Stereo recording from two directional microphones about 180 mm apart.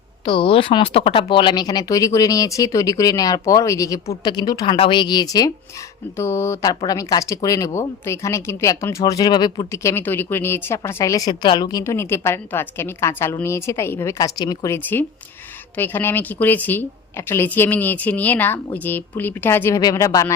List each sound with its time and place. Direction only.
0.3 s speech: 30° left (ahead or behind)